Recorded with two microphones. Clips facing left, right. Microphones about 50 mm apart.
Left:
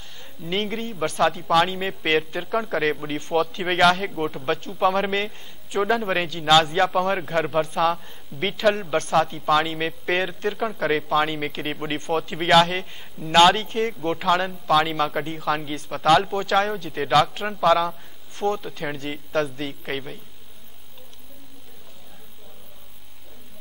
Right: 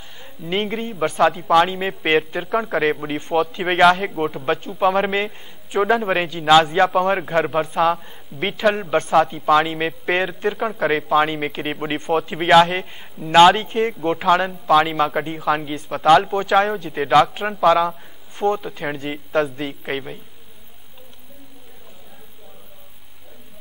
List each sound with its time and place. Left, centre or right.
0.2 s speech: centre